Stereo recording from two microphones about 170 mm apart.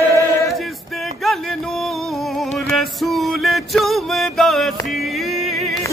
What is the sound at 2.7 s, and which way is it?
Music, centre (ahead or behind).